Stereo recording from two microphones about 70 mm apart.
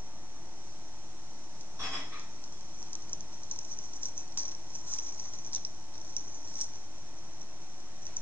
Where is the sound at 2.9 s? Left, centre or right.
Left.